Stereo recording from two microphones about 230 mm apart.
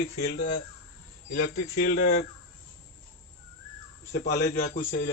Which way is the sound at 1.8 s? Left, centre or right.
Left.